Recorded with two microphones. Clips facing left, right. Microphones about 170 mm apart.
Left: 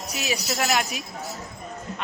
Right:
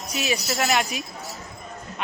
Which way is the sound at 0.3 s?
Centre (ahead or behind).